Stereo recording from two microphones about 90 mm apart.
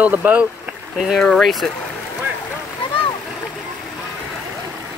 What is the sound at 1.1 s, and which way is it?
Speech, 5° left (ahead or behind).